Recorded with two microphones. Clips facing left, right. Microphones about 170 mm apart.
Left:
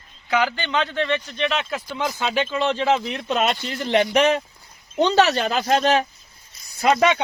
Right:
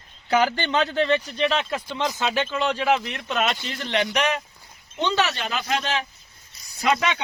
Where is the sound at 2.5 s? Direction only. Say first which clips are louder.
Left 2 dB; centre (ahead or behind).